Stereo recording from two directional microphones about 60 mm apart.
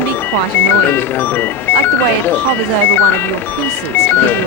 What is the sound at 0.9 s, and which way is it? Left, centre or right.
Speech, left.